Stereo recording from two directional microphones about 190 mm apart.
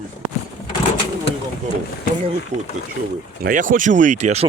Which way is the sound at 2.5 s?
35° right (ahead or behind).